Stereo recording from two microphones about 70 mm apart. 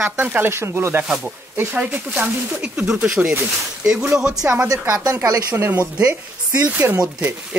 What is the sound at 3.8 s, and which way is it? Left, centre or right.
Speech, centre.